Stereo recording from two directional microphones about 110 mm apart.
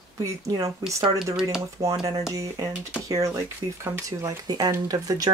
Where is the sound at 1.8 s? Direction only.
25° right (ahead or behind).